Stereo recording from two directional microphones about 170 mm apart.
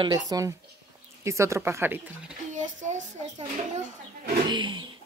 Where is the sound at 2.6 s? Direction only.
45° right (ahead or behind).